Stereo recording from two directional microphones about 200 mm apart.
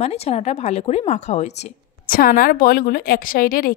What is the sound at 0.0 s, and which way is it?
A woman's voice, 30° left (ahead or behind).